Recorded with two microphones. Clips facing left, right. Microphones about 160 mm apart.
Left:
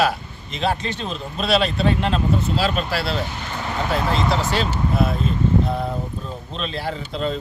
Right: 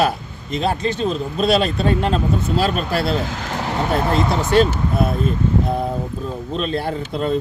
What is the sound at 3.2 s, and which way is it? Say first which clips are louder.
Vehicle: right 4 dB; 90° right.